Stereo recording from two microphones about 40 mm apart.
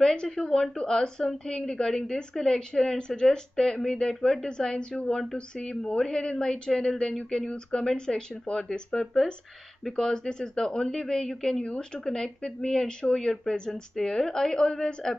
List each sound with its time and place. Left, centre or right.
0.4 s a woman's voice: centre
9.0 s speech: centre
9.9 s a woman's voice: centre
11.6 s speech: left
12.0 s a woman's voice: centre